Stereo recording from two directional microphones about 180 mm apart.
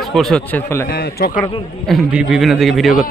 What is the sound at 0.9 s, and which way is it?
Speech, 55° left (ahead or behind).